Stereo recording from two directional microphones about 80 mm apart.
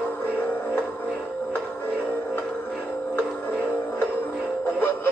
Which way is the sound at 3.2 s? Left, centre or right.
Left.